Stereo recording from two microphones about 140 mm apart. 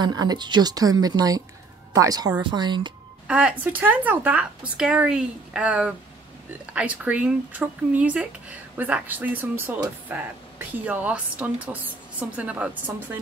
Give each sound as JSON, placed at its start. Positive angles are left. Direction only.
{"t": 0.0, "sound": "a woman's voice", "side_deg": -30}
{"t": 3.3, "sound": "speech", "side_deg": -5}